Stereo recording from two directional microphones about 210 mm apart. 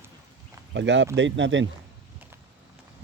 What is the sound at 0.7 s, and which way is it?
Speech, 60° right (ahead or behind).